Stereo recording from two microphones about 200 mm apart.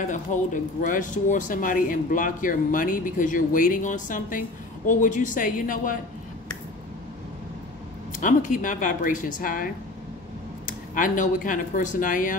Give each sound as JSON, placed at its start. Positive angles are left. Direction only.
{"t": 0.0, "sound": "speech", "side_deg": 40}
{"t": 8.2, "sound": "speech", "side_deg": 40}
{"t": 11.0, "sound": "speech", "side_deg": 40}